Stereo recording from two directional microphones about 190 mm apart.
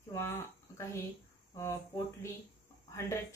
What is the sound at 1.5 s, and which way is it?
A woman's voice, 15° left (ahead or behind).